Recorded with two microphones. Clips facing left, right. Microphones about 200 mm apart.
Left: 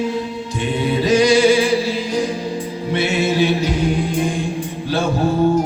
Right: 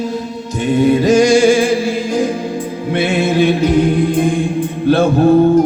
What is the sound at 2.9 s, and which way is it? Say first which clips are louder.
Music: right 3 dB; 55° right (ahead or behind).